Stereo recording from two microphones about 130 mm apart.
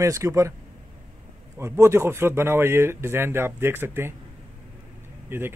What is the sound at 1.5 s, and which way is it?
Speech, 20° right (ahead or behind).